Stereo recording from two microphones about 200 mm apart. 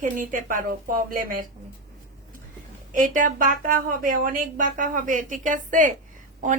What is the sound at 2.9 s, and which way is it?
Speech, 40° right (ahead or behind).